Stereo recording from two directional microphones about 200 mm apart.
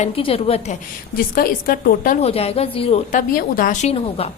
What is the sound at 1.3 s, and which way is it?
Speech, 45° left (ahead or behind).